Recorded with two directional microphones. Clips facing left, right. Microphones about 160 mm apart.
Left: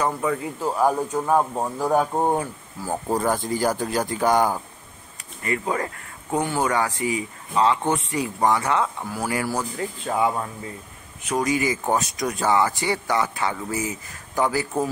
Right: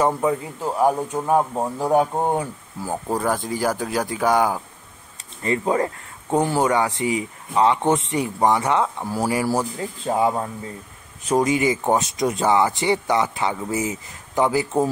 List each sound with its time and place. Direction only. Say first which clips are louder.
0.0 s speech: right 4 dB; 20° right (ahead or behind)
2.9 s speech: even; centre (ahead or behind)
5.4 s speech: right 5 dB; 25° right (ahead or behind)